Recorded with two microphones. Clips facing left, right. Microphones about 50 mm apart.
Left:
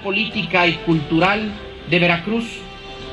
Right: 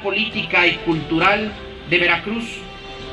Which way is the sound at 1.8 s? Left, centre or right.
Right.